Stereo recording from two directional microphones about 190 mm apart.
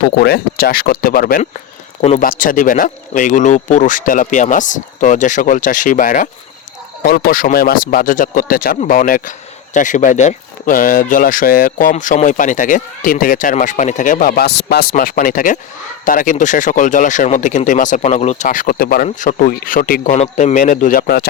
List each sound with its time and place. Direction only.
0.2 s speech: 55° left (ahead or behind)
20.1 s speech: 35° left (ahead or behind)